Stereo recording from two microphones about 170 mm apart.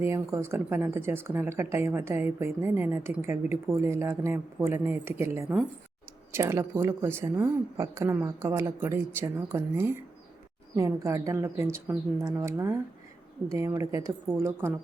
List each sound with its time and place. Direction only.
0.0 s a woman's voice: 15° right (ahead or behind)